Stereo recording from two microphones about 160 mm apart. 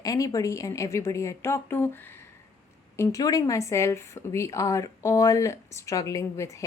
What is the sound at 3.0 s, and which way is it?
A woman's voice, 20° left (ahead or behind).